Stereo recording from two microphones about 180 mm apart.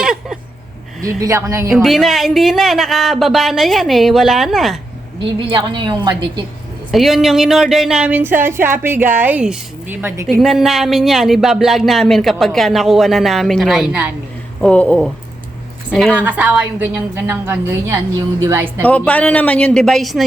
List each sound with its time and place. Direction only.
0.0 s a sound: 5° right (ahead or behind)
1.0 s speech: 20° right (ahead or behind)
1.7 s speech: centre (ahead or behind)
5.5 s a woman's voice: 25° right (ahead or behind)
6.9 s speech: centre (ahead or behind)
10.4 s speech: centre (ahead or behind)
14.6 s speech: 5° left (ahead or behind); by 18.9 s 15° right (ahead or behind)
18.9 s speech: 10° left (ahead or behind)